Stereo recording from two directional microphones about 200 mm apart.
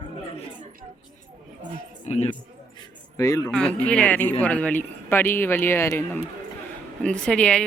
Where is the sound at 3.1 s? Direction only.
15° left (ahead or behind).